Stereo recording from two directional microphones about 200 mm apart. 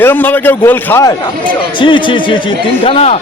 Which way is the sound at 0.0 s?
10° left (ahead or behind).